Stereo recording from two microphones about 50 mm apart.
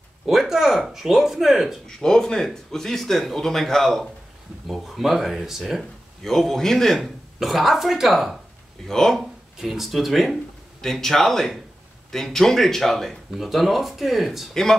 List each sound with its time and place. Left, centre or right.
0.3 s speech: centre
1.9 s speech: centre
6.2 s speech: centre
7.3 s speech: centre
8.8 s speech: centre
9.2 s speech: centre
10.8 s speech: centre
14.5 s speech: centre